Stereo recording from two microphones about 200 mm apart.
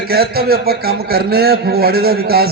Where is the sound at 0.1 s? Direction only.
50° right (ahead or behind).